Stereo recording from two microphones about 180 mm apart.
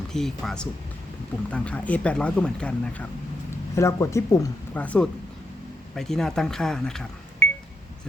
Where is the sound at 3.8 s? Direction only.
15° left (ahead or behind).